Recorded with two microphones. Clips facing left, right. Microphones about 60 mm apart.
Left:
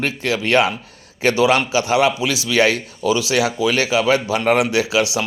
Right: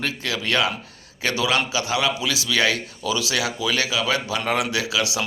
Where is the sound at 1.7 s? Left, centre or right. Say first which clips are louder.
Left 7 dB; left.